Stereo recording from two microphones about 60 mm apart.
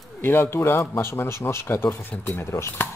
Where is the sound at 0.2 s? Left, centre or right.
Left.